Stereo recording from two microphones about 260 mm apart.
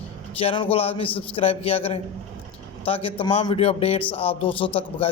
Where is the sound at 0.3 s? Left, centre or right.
Centre.